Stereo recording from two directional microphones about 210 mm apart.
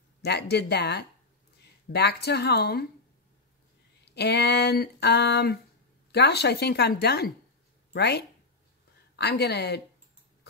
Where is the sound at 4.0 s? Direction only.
50° left (ahead or behind).